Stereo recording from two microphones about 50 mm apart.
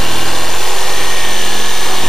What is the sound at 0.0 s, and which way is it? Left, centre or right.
Vehicle, centre.